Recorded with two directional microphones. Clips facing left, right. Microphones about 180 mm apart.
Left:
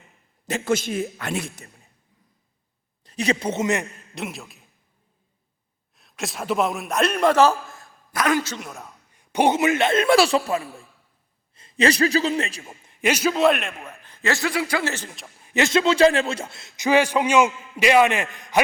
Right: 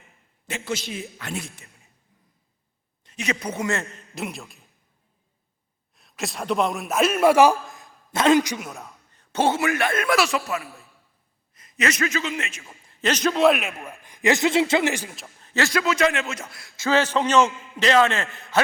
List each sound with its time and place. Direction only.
0.4 s a man's voice: 45° left (ahead or behind)
3.0 s a man's voice: 35° left (ahead or behind); by 3.8 s 20° left (ahead or behind)
4.1 s a man's voice: centre (ahead or behind)
6.0 s a man's voice: centre (ahead or behind); by 8.6 s 15° right (ahead or behind)
8.6 s a man's voice: centre (ahead or behind)
9.1 s a man's voice: 15° left (ahead or behind); by 12.7 s 35° left (ahead or behind)
12.9 s a man's voice: 10° left (ahead or behind); by 15.1 s 15° right (ahead or behind)
15.4 s a man's voice: 15° left (ahead or behind)